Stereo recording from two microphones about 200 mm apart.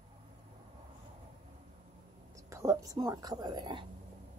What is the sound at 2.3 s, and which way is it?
Speech, 15° right (ahead or behind).